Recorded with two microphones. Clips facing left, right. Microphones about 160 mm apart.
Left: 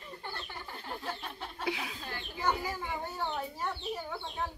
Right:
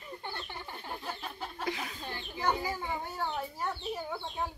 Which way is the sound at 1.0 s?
5° right (ahead or behind).